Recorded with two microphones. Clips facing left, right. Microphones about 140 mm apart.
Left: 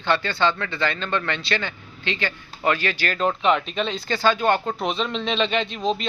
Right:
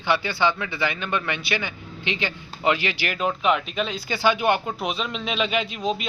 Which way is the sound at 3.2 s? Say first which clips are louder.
Left 2 dB; 5° right (ahead or behind).